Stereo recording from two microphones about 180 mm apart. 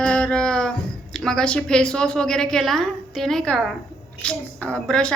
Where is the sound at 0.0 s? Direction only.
5° left (ahead or behind).